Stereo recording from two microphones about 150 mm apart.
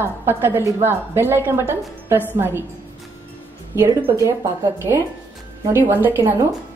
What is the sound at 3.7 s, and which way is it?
A woman's voice, 20° right (ahead or behind).